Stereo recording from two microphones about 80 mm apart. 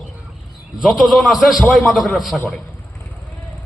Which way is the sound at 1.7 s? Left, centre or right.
Centre.